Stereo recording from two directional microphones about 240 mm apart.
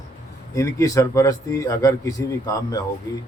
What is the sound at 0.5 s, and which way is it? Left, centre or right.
Speech, centre.